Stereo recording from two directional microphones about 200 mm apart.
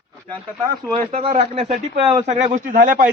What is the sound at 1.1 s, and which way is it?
A man's voice, 30° right (ahead or behind).